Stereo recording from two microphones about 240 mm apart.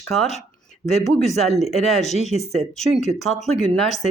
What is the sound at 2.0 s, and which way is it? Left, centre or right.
Speech, left.